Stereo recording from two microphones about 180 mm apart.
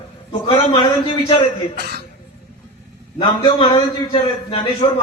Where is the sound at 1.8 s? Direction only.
65° right (ahead or behind).